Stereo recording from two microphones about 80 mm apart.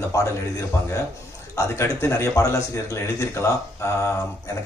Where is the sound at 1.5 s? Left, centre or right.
Left.